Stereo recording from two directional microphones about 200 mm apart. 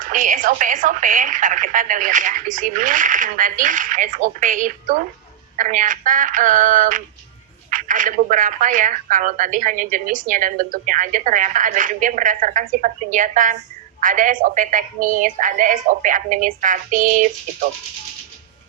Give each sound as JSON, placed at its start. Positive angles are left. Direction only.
{"t": 0.0, "sound": "speech", "side_deg": -40}